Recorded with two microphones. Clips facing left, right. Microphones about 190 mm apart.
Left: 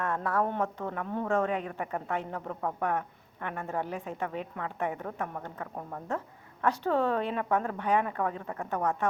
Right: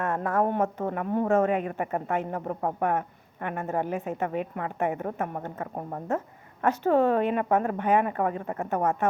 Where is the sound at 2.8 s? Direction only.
50° right (ahead or behind).